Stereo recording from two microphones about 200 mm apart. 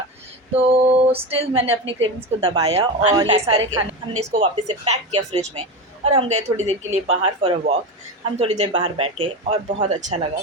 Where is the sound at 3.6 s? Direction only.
90° right.